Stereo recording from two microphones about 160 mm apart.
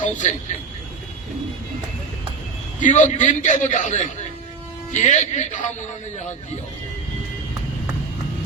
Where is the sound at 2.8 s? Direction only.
50° left (ahead or behind).